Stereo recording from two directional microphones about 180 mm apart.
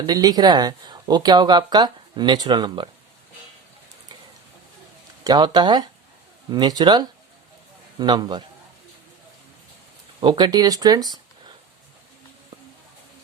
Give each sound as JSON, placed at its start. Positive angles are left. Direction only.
{"t": 0.0, "sound": "speech", "side_deg": -20}
{"t": 5.2, "sound": "speech", "side_deg": -25}
{"t": 10.2, "sound": "speech", "side_deg": -25}